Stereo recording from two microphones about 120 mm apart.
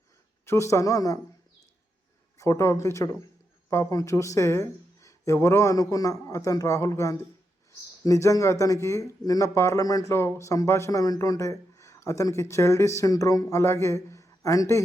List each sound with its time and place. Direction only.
0.4 s speech: 25° left (ahead or behind)
2.4 s speech: 25° left (ahead or behind)